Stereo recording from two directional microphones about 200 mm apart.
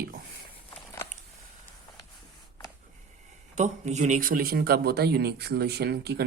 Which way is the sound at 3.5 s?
35° right (ahead or behind).